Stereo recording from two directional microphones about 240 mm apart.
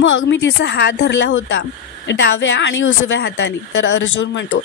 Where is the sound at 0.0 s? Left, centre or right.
Left.